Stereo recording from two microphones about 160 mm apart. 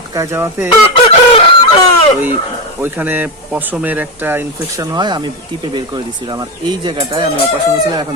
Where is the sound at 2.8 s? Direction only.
10° right (ahead or behind).